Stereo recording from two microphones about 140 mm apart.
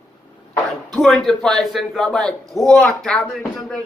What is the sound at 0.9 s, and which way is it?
A man's voice, 5° left (ahead or behind).